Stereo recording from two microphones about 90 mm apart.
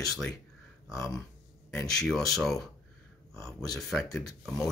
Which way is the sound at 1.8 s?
5° left (ahead or behind).